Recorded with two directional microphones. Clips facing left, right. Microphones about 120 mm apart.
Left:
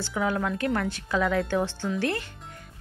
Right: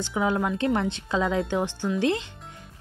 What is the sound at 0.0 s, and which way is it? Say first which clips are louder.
A woman's voice: right 2 dB; 20° right (ahead or behind).